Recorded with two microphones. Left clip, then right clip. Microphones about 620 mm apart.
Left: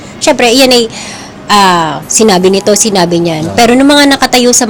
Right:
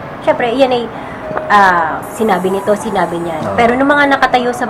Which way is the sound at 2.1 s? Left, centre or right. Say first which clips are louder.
Left 8 dB; left.